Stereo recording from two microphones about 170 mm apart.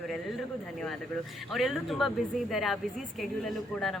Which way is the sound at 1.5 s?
Centre (ahead or behind).